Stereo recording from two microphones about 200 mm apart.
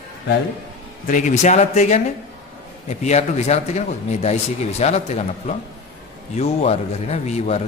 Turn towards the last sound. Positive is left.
turn(degrees=35)  # may be behind; listen again after turning